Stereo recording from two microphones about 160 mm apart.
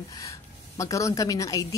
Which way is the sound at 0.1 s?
20° left (ahead or behind).